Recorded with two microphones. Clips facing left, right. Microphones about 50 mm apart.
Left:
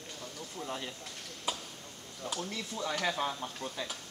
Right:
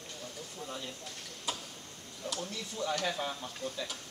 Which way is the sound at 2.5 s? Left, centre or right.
Left.